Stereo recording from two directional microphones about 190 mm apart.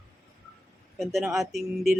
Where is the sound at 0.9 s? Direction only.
Centre (ahead or behind).